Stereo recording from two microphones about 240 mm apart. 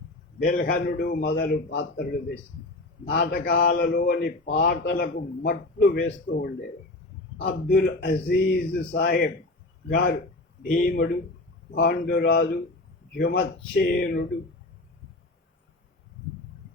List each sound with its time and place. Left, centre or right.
0.4 s a man's voice: left
10.6 s a man's voice: left